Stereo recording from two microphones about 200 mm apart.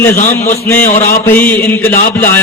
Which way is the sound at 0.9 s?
35° left (ahead or behind).